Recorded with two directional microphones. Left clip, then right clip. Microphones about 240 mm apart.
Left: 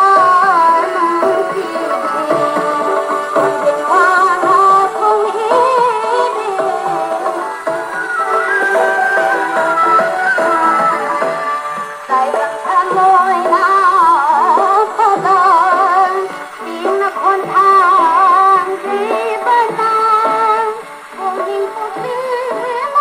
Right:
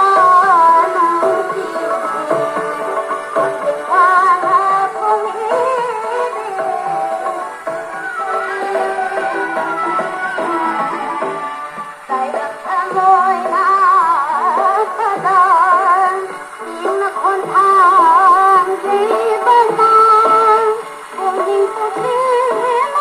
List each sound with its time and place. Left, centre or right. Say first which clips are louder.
0.0 s music: left 1 dB; left
8.3 s music: left 5 dB; left
12.7 s music: left 2 dB; left; by 20.6 s centre
22.1 s music: right 5 dB; centre